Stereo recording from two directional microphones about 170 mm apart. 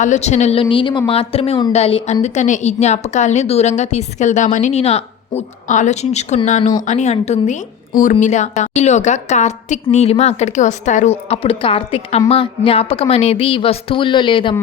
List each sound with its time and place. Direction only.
0.0 s a woman's voice: 45° left (ahead or behind)